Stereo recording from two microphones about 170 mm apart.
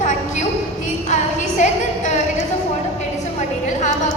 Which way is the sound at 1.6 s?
45° left (ahead or behind).